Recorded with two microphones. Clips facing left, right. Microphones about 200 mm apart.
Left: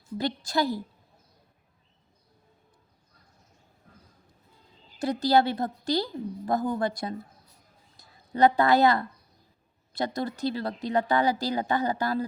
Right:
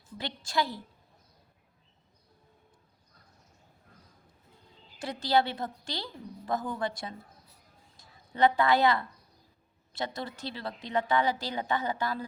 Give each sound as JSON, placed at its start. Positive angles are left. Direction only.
{"t": 0.2, "sound": "speech", "side_deg": 40}
{"t": 4.9, "sound": "a woman's voice", "side_deg": 40}